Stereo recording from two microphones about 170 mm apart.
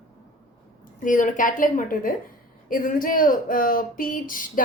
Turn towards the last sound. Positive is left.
turn(degrees=55)  # may be behind; listen again after turning